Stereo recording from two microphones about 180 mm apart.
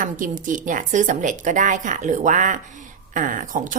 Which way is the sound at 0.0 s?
50° right (ahead or behind).